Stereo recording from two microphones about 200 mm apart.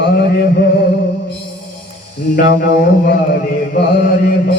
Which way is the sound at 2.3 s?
50° left (ahead or behind).